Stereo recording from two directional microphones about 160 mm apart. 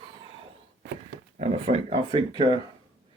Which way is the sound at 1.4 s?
45° right (ahead or behind).